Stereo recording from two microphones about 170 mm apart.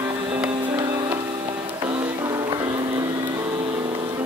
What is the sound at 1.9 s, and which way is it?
Music, 15° right (ahead or behind).